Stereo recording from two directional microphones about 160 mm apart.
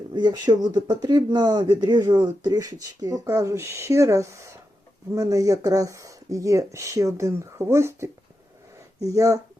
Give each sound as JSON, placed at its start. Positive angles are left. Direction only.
{"t": 0.1, "sound": "speech", "side_deg": -25}